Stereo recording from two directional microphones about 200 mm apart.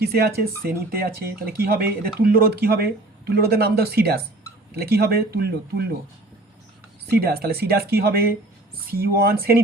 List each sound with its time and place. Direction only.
0.0 s speech: 50° right (ahead or behind)
7.1 s speech: 50° right (ahead or behind)